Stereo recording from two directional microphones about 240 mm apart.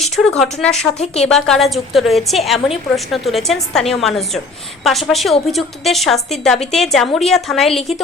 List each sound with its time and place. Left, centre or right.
0.0 s a woman's voice: centre
0.9 s speech: left
1.3 s a woman's voice: centre